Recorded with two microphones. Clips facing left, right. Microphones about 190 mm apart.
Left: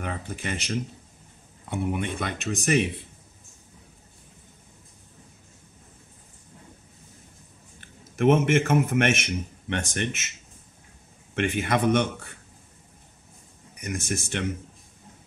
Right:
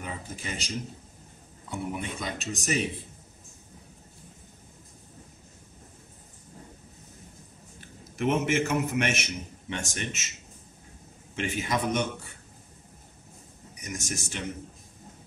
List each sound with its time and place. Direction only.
0.0 s speech: 65° left (ahead or behind)
8.2 s a man's voice: 55° left (ahead or behind)
11.3 s speech: 60° left (ahead or behind)
13.7 s speech: 55° left (ahead or behind)